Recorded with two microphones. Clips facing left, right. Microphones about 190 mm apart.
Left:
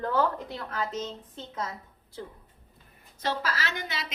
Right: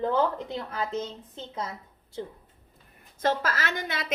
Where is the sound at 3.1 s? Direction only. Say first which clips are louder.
Right 4 dB; 50° right (ahead or behind).